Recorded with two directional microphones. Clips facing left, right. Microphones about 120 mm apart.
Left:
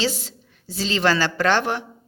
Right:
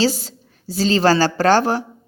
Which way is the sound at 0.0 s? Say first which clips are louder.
Right 6 dB; 40° right (ahead or behind).